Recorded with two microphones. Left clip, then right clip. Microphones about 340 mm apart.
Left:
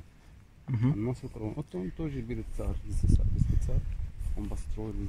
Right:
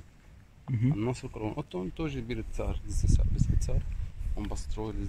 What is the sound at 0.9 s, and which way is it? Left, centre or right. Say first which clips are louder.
Speech: right 2 dB; right.